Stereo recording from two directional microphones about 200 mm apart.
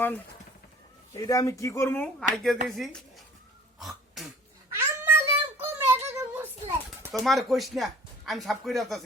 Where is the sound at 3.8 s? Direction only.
Centre (ahead or behind).